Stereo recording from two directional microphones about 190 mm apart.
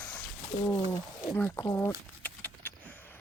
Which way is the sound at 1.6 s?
15° left (ahead or behind).